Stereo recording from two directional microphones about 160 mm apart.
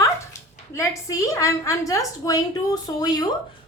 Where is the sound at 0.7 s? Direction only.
20° left (ahead or behind).